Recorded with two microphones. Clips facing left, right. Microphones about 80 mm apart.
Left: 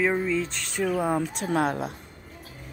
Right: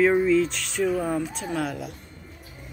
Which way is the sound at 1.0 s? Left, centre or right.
Left.